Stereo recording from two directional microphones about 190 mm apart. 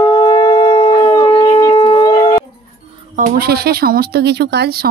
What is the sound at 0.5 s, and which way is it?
Howl, 30° left (ahead or behind).